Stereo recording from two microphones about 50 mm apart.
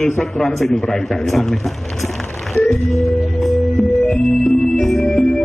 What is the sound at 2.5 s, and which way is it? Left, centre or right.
Music, right.